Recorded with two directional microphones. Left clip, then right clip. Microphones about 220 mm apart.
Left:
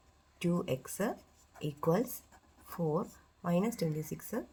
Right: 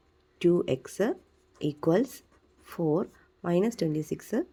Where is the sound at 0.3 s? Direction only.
35° right (ahead or behind).